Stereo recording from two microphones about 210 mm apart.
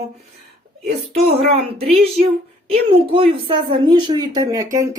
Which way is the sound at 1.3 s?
30° right (ahead or behind).